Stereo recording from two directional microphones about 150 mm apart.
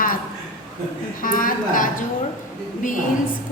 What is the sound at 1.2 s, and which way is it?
A woman's voice, 65° left (ahead or behind).